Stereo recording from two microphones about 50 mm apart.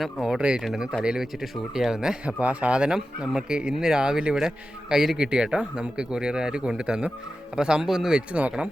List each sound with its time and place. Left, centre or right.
0.0 s a man's voice: centre
0.3 s speech: centre
0.6 s a man's voice: centre
2.2 s a man's voice: right; by 8.2 s centre
8.3 s speech: right